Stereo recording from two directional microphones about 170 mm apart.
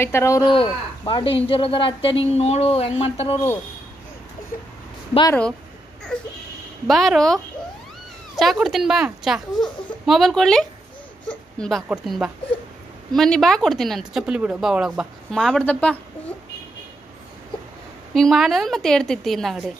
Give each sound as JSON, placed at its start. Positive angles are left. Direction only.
{"t": 0.0, "sound": "speech", "side_deg": 15}
{"t": 6.9, "sound": "speech", "side_deg": 0}
{"t": 18.1, "sound": "speech", "side_deg": 0}